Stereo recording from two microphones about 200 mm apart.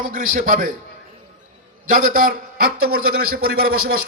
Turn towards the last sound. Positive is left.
turn(degrees=-50)  # may be behind; listen again after turning